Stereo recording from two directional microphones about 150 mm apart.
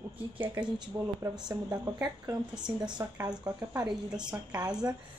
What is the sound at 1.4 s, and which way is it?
A woman's voice, 25° right (ahead or behind).